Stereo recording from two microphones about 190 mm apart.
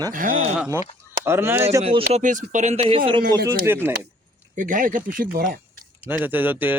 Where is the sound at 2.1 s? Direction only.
40° right (ahead or behind).